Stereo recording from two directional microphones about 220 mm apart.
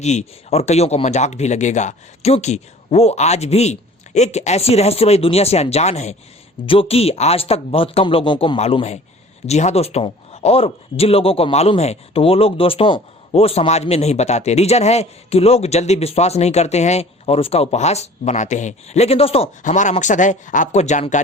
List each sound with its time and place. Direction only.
0.0 s a man's voice: 30° left (ahead or behind)